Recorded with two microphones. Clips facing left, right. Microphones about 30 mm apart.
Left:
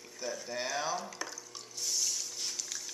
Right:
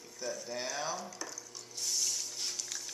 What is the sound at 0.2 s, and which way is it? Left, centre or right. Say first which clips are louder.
Speech: left 1 dB; centre.